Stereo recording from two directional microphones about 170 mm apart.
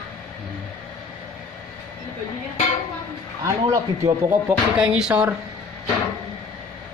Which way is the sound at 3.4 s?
20° right (ahead or behind).